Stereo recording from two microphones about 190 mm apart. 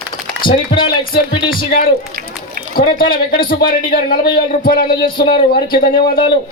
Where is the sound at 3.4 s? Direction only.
50° left (ahead or behind).